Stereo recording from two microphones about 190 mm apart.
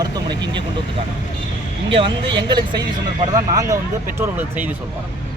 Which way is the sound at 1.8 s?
25° right (ahead or behind).